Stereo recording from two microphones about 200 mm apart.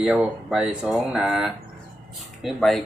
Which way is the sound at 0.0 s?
5° right (ahead or behind).